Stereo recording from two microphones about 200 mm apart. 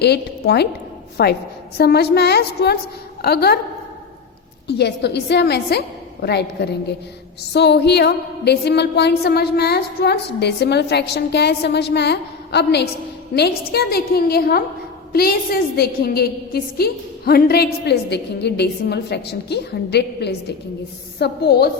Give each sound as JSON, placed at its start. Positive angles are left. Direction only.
{"t": 0.0, "sound": "a woman's voice", "side_deg": 55}
{"t": 4.7, "sound": "a sound", "side_deg": 55}
{"t": 13.3, "sound": "a woman's voice", "side_deg": 55}